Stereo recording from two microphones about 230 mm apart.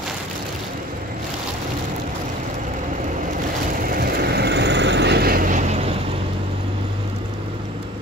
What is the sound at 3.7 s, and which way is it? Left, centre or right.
Vehicle, right.